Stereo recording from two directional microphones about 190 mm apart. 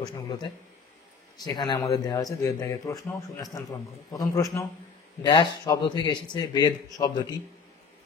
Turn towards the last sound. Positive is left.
turn(degrees=20)  # may be behind; listen again after turning